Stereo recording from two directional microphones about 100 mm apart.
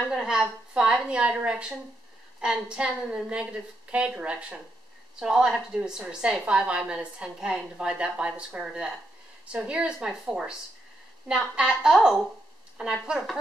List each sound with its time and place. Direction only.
0.1 s speech: 5° right (ahead or behind)